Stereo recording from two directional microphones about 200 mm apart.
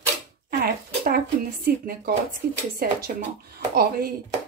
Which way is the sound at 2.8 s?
45° right (ahead or behind).